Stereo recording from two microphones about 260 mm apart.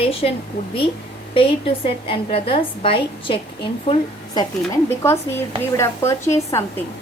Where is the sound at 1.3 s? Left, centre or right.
Left.